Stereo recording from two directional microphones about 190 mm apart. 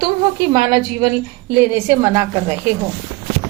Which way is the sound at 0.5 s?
20° right (ahead or behind).